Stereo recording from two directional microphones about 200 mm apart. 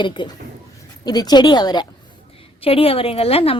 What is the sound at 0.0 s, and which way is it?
A woman's voice, 25° left (ahead or behind).